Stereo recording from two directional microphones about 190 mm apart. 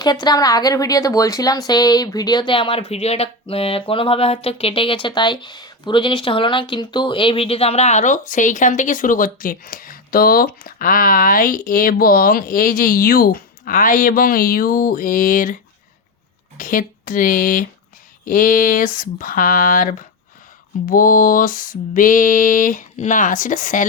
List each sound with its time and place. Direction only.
0.0 s a woman's voice: 20° left (ahead or behind); by 15.5 s 45° left (ahead or behind)
16.6 s mantra: 45° left (ahead or behind)